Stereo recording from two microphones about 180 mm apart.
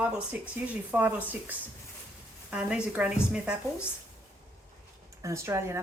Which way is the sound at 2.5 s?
10° right (ahead or behind).